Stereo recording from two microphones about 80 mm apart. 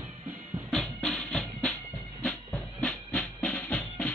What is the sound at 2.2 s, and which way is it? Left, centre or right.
Music, centre.